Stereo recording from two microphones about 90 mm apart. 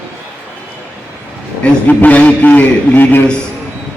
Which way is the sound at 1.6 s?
15° left (ahead or behind).